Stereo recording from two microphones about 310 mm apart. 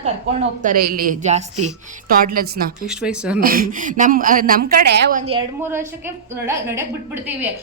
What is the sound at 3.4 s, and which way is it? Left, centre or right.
A woman's voice, right.